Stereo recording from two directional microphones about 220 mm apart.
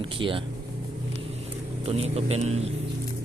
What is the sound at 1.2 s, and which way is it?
Vehicle, 25° right (ahead or behind).